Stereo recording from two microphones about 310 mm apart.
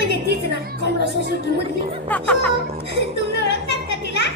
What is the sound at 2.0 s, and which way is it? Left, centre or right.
Speech, centre.